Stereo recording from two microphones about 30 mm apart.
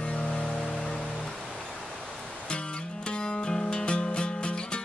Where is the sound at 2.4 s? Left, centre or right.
Left.